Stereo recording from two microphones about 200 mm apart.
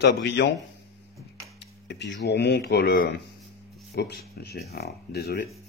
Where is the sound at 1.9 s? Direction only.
60° left (ahead or behind).